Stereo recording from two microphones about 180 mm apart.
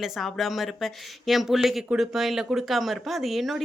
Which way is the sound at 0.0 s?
Centre (ahead or behind).